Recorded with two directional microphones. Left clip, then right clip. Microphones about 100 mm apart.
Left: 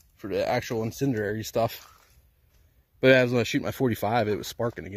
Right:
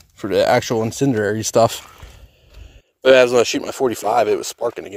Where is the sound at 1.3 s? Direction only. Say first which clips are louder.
Right 12 dB; 40° right (ahead or behind).